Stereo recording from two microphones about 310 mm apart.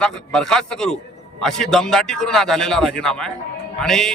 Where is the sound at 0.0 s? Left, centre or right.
Centre.